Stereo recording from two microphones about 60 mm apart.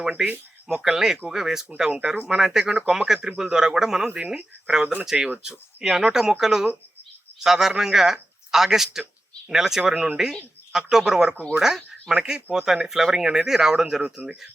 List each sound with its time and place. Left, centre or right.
0.2 s speech: centre
9.9 s speech: centre